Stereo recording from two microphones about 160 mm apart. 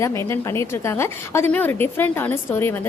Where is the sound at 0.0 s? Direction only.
15° left (ahead or behind).